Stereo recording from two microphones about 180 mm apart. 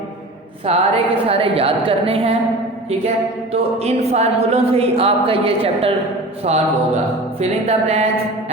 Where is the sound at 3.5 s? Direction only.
35° right (ahead or behind).